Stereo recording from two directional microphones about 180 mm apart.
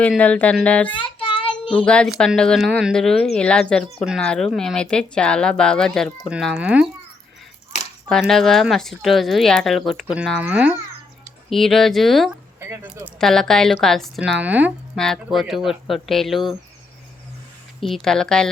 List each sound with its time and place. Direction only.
0.2 s speech: 10° left (ahead or behind)
0.9 s child singing: 30° left (ahead or behind)
1.7 s speech: 5° left (ahead or behind)
8.0 s speech: centre (ahead or behind)
12.5 s speech: 15° right (ahead or behind)
13.1 s speech: centre (ahead or behind)
14.9 s speech: centre (ahead or behind)
17.7 s speech: centre (ahead or behind)